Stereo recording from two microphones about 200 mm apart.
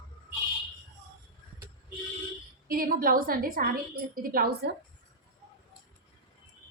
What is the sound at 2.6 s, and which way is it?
A woman's voice, 45° right (ahead or behind).